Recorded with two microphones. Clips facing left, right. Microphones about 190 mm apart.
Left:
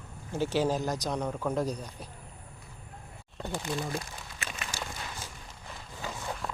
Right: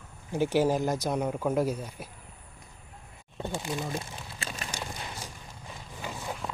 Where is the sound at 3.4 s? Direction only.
15° right (ahead or behind).